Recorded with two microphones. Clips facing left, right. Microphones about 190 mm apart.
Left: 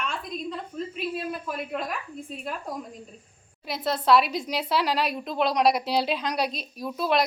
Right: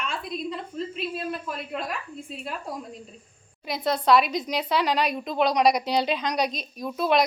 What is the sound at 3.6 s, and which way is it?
A woman's voice, centre (ahead or behind).